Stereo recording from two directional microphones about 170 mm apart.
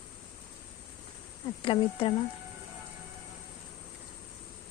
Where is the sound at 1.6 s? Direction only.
30° left (ahead or behind).